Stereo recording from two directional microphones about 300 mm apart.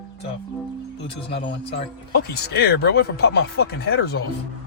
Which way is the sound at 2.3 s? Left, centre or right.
Left.